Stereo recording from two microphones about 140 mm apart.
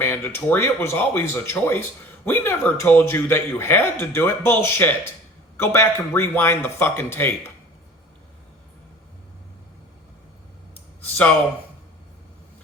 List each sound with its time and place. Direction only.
0.0 s speech: 15° left (ahead or behind)